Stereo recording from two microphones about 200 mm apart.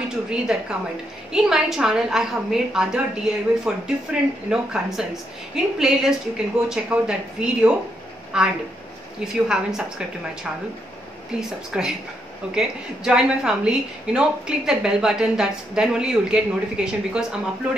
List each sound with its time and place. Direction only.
0.3 s speech: 5° right (ahead or behind)
11.3 s speech: 5° right (ahead or behind)